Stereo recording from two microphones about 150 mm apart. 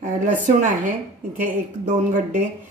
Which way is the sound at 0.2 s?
60° right (ahead or behind).